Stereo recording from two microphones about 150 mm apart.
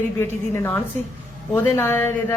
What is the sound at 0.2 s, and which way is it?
Speech, 15° left (ahead or behind).